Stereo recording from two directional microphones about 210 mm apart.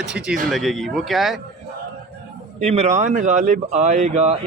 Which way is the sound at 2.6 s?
30° right (ahead or behind).